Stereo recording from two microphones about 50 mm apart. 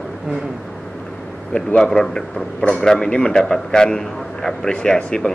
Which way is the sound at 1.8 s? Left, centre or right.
Centre.